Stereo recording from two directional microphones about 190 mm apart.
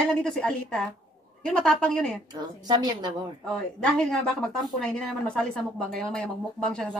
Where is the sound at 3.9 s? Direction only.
5° left (ahead or behind).